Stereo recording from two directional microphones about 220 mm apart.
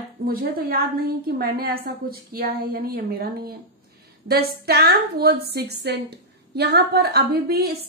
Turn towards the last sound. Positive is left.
turn(degrees=-45)  # may be behind; listen again after turning